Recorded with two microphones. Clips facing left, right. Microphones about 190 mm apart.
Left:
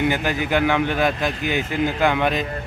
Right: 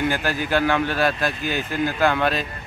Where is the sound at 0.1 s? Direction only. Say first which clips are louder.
Left 1 dB; 15° left (ahead or behind).